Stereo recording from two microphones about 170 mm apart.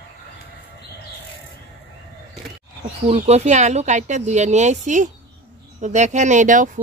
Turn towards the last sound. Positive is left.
turn(degrees=-45)  # may be behind; listen again after turning